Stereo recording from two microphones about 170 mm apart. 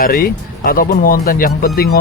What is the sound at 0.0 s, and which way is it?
Speech, 60° left (ahead or behind).